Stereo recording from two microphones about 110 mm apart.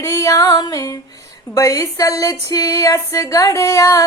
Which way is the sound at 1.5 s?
30° left (ahead or behind).